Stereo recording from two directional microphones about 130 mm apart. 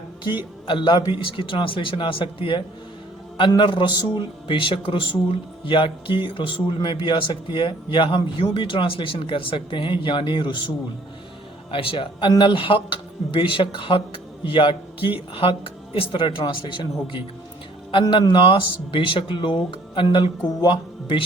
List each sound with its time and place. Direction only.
0.3 s a man's voice: 35° left (ahead or behind)
11.7 s a man's voice: 45° left (ahead or behind)